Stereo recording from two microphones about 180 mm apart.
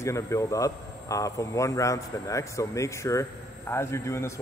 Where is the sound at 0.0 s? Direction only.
15° left (ahead or behind).